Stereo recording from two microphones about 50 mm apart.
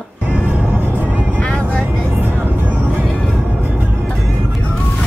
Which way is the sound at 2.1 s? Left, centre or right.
Right.